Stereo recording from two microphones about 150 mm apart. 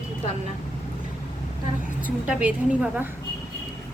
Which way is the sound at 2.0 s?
10° right (ahead or behind).